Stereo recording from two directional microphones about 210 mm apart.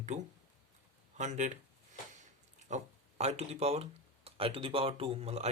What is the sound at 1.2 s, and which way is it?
Speech, 35° right (ahead or behind).